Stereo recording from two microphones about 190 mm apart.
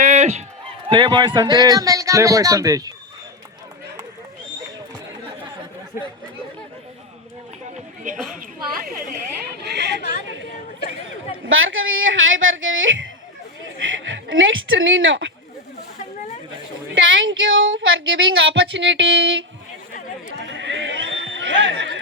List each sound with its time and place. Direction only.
0.0 s fowl: 40° right (ahead or behind)
0.9 s speech: 25° right (ahead or behind)
9.5 s chatter: 60° right (ahead or behind)
10.0 s a woman's voice: 50° left (ahead or behind)
11.4 s a woman's voice: 90° right
16.9 s a woman's voice: 90° right; by 19.5 s 70° right (ahead or behind)
20.3 s a sound: 70° right (ahead or behind)